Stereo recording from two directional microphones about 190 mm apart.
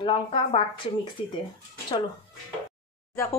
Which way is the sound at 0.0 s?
25° left (ahead or behind).